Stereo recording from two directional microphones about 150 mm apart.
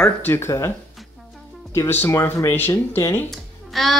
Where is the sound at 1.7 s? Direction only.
15° left (ahead or behind).